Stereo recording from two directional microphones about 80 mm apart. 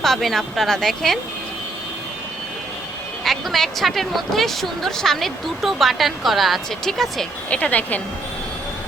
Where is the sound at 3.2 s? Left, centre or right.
Centre.